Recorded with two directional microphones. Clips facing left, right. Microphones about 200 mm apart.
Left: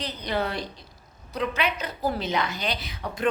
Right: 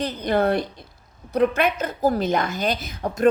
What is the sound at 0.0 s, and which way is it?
A woman's voice, 50° right (ahead or behind).